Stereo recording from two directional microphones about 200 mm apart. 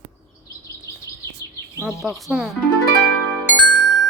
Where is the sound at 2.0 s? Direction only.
Centre (ahead or behind).